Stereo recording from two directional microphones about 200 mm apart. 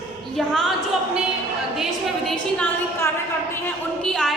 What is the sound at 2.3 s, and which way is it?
A woman's voice, 5° left (ahead or behind).